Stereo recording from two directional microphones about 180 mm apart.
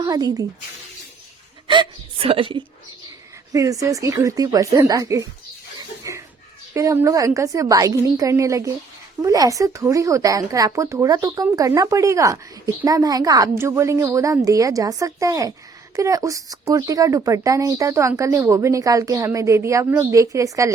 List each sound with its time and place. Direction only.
0.0 s speech: 20° right (ahead or behind)
1.6 s hiccup: 25° right (ahead or behind)
3.5 s speech: 20° right (ahead or behind)
6.0 s a sound: 15° right (ahead or behind)
6.7 s speech: 15° right (ahead or behind)